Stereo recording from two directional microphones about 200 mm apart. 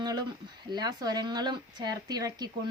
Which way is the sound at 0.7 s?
20° right (ahead or behind).